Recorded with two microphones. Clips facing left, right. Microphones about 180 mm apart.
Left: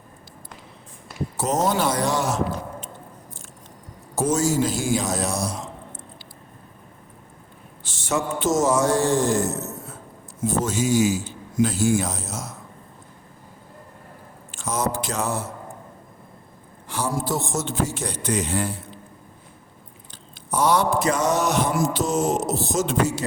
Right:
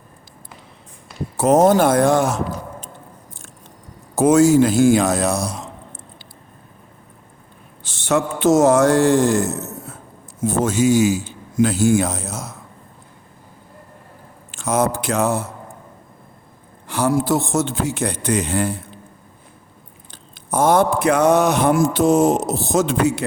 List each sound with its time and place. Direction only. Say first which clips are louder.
1.4 s speech: right 9 dB; 55° right (ahead or behind)
4.1 s a man's voice: right 9 dB; 60° right (ahead or behind)
7.9 s a man's voice: right 5 dB; 65° right (ahead or behind)
14.6 s a man's voice: right 6 dB; 60° right (ahead or behind)
16.9 s a man's voice: right 7 dB; 65° right (ahead or behind)
20.5 s a man's voice: right 5 dB; 50° right (ahead or behind)